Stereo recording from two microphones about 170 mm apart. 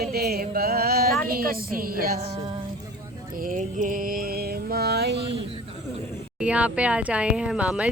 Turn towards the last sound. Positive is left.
turn(degrees=-5)  # may be behind; listen again after turning